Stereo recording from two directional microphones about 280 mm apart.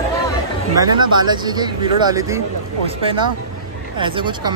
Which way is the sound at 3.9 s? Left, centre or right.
Centre.